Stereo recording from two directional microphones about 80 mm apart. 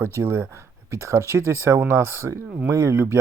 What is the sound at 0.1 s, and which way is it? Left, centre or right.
Speech, right.